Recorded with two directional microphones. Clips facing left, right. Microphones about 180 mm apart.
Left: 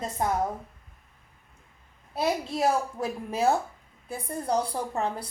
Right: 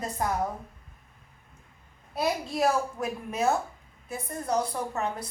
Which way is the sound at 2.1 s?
25° left (ahead or behind).